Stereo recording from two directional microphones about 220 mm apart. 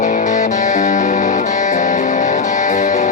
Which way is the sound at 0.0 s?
35° left (ahead or behind).